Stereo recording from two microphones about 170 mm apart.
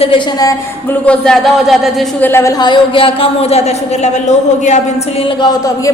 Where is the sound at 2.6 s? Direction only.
30° left (ahead or behind).